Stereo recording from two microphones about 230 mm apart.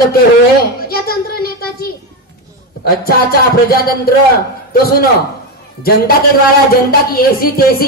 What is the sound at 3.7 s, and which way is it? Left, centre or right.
Speech, left.